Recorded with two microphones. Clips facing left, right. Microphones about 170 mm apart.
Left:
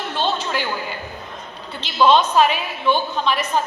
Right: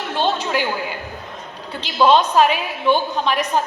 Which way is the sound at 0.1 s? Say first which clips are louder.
Right 3 dB; 15° right (ahead or behind).